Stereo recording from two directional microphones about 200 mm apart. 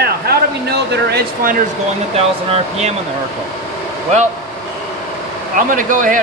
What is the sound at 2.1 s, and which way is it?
Speech, 30° right (ahead or behind).